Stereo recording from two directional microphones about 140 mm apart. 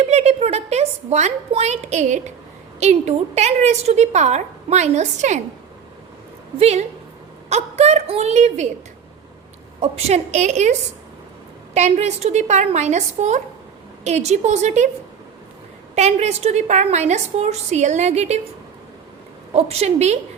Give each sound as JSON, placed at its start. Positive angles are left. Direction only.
{"t": 0.0, "sound": "a woman's voice", "side_deg": -50}
{"t": 6.6, "sound": "a woman's voice", "side_deg": -50}
{"t": 9.8, "sound": "a woman's voice", "side_deg": -50}
{"t": 16.0, "sound": "a woman's voice", "side_deg": -50}
{"t": 19.5, "sound": "a woman's voice", "side_deg": -50}